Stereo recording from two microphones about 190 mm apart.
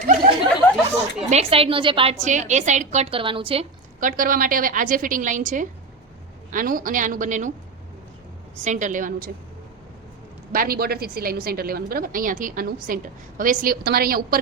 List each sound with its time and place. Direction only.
0.9 s a woman's voice: 35° right (ahead or behind)
4.0 s a woman's voice: 45° right (ahead or behind)
8.6 s a woman's voice: 40° right (ahead or behind)
10.5 s a woman's voice: 50° right (ahead or behind)